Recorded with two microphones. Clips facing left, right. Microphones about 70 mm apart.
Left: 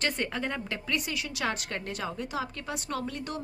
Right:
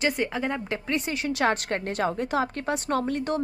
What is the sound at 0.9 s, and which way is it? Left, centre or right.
A woman's voice, right.